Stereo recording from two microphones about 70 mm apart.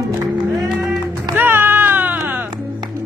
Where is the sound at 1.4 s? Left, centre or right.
Right.